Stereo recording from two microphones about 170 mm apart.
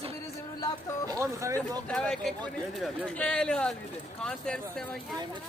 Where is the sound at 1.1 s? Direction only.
20° right (ahead or behind).